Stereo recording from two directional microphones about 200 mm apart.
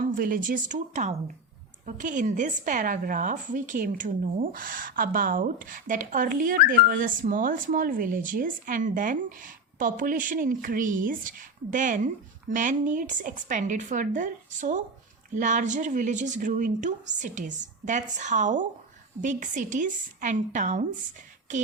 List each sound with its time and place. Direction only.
0.0 s a woman's voice: 45° right (ahead or behind)